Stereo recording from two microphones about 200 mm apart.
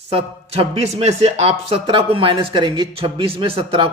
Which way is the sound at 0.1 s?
30° right (ahead or behind).